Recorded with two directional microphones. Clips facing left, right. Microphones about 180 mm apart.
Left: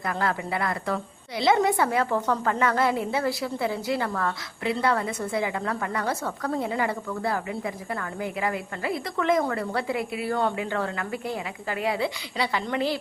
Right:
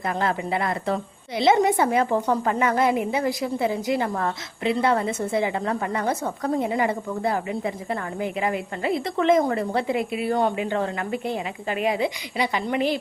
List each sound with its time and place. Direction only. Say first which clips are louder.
0.1 s a woman's voice: right 3 dB; 20° right (ahead or behind)